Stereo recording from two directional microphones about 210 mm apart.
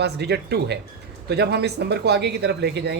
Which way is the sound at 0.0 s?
50° right (ahead or behind).